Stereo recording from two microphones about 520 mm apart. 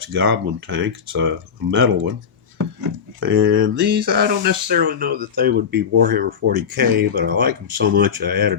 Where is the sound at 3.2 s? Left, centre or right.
Right.